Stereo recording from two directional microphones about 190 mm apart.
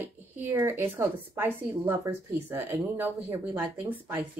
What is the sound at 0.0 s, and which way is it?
A woman's voice, 10° right (ahead or behind).